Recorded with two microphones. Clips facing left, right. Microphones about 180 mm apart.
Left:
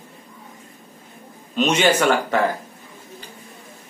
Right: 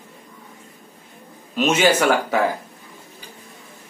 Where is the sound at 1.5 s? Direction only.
5° right (ahead or behind).